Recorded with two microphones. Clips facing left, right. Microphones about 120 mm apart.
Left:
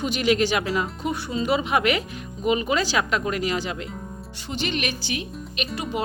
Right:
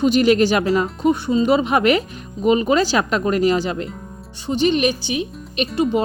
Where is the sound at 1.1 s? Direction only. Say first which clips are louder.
Right 6 dB; 25° right (ahead or behind).